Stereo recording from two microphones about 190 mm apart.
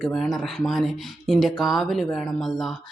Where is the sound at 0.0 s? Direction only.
Centre (ahead or behind).